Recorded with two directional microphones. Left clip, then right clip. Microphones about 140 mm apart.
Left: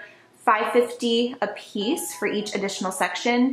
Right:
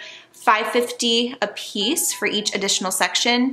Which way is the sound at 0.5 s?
35° right (ahead or behind).